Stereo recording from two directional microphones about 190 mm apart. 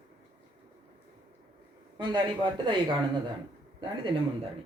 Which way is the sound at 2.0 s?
25° right (ahead or behind).